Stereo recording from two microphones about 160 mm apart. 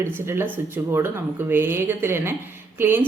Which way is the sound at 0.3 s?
15° right (ahead or behind).